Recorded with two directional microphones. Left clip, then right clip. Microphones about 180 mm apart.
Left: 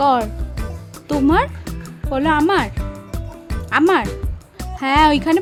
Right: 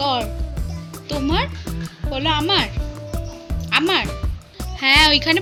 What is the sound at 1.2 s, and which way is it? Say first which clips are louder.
Speech: left 6 dB; 55° left (ahead or behind).